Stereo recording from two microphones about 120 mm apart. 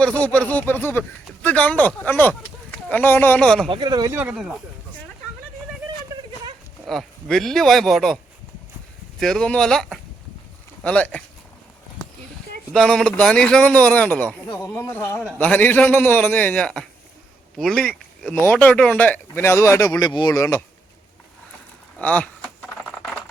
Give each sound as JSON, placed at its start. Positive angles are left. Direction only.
{"t": 0.0, "sound": "a man's voice", "side_deg": 10}
{"t": 3.7, "sound": "speech", "side_deg": -35}
{"t": 4.1, "sound": "speech", "side_deg": -15}
{"t": 4.4, "sound": "speech", "side_deg": -5}
{"t": 6.8, "sound": "speech", "side_deg": 5}
{"t": 9.2, "sound": "a man's voice", "side_deg": 5}
{"t": 12.7, "sound": "a man's voice", "side_deg": 5}
{"t": 21.9, "sound": "speech", "side_deg": 10}